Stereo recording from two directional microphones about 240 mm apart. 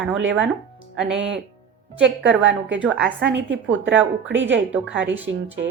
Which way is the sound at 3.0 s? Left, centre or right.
Right.